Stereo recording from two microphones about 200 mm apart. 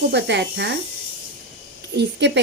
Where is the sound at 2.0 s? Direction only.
60° right (ahead or behind).